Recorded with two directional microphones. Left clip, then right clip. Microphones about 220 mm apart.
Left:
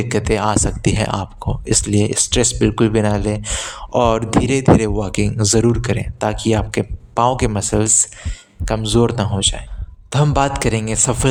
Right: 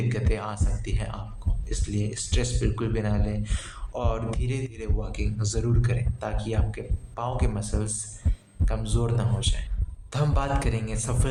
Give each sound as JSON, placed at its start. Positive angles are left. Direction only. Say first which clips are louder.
{"t": 0.1, "sound": "speech", "louder": "left 14 dB", "side_deg": 50}